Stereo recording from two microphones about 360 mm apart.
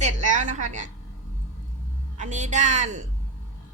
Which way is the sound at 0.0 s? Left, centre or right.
Right.